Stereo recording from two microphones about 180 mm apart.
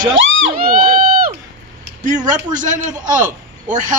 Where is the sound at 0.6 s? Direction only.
55° right (ahead or behind).